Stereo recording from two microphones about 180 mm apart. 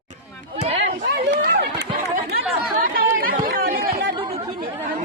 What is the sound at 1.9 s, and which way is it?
Chatter, 50° right (ahead or behind).